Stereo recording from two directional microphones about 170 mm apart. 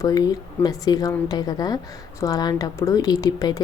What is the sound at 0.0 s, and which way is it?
Speech, 20° left (ahead or behind).